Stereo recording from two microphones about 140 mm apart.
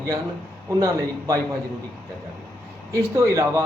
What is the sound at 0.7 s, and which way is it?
Speech, 25° right (ahead or behind).